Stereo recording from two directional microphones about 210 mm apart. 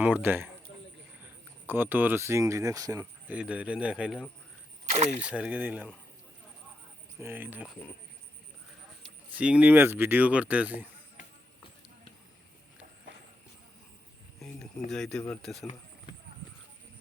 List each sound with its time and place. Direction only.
0.0 s speech: 10° right (ahead or behind)
1.6 s speech: 10° right (ahead or behind)
4.9 s speech: 30° right (ahead or behind)
5.3 s speech: 5° right (ahead or behind)
7.2 s speech: 10° right (ahead or behind)
9.3 s speech: 5° right (ahead or behind)
14.3 s speech: 5° left (ahead or behind)